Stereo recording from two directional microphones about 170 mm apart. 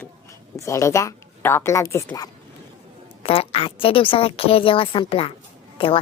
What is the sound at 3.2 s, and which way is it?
A woman's voice, 35° left (ahead or behind).